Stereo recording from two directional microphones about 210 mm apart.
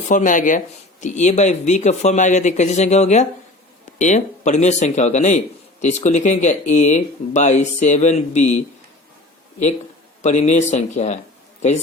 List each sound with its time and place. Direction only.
0.1 s speech: 35° left (ahead or behind)
10.2 s speech: 35° left (ahead or behind)